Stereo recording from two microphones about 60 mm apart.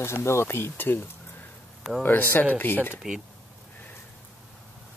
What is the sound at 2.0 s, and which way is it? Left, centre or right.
Speech, left.